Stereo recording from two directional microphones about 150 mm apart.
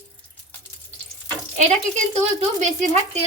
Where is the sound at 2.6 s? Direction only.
55° right (ahead or behind).